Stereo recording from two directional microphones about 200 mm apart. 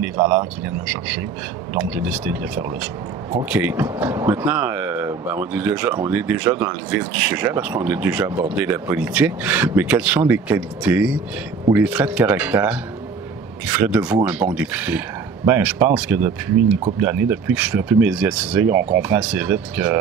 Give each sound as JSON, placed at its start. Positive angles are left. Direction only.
{"t": 0.0, "sound": "speech", "side_deg": -15}
{"t": 2.0, "sound": "speech", "side_deg": -10}